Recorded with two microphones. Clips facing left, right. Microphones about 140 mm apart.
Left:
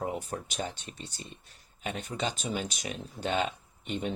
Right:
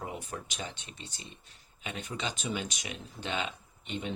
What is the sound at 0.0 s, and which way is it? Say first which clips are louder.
Speech: left 5 dB; 40° left (ahead or behind).